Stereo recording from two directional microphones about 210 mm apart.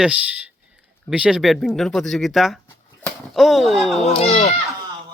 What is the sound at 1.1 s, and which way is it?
Speech, 5° right (ahead or behind).